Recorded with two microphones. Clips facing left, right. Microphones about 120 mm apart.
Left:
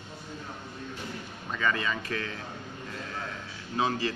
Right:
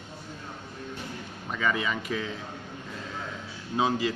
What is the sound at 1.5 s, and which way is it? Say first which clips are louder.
Speech: right 1 dB; 10° right (ahead or behind).